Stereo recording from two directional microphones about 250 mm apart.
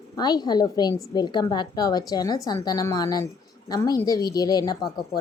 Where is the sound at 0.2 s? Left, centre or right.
Centre.